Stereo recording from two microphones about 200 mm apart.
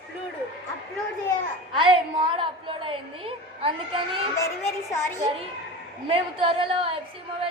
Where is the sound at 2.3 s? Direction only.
25° right (ahead or behind).